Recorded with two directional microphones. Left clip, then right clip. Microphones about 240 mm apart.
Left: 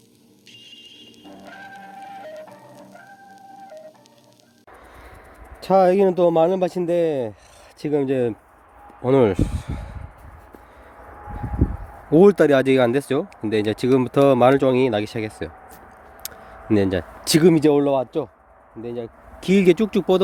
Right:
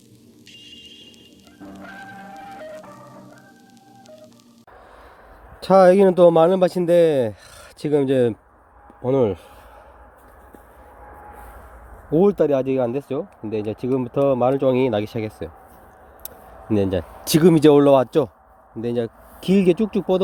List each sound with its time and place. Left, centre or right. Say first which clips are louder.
0.7 s a sound: right 1 dB; centre
2.3 s music: right 4 dB; centre
5.5 s speech: right 3 dB; centre
9.0 s speech: left 2 dB; centre
12.1 s speech: left 3 dB; centre; by 19.1 s right
19.4 s speech: left 1 dB; centre